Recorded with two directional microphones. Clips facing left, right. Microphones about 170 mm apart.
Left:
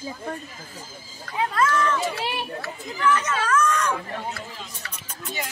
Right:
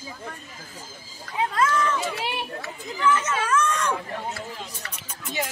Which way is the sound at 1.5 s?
15° right (ahead or behind).